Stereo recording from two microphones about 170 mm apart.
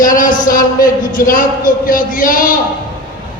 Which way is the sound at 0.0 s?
50° left (ahead or behind).